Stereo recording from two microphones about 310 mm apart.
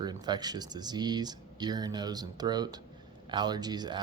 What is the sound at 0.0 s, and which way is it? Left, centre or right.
Speech, centre.